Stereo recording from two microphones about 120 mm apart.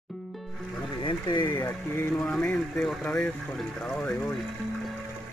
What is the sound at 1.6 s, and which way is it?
Speech, 20° left (ahead or behind).